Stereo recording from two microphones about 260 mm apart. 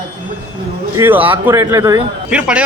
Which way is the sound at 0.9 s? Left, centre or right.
Centre.